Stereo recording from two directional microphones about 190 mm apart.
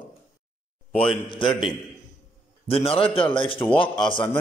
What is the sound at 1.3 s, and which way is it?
Speech, 25° left (ahead or behind).